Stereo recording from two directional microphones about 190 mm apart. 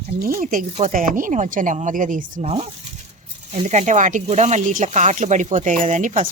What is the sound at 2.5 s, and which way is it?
Speech, 30° right (ahead or behind).